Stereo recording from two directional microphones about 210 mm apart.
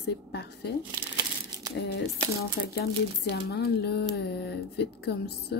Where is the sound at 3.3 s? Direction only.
50° left (ahead or behind).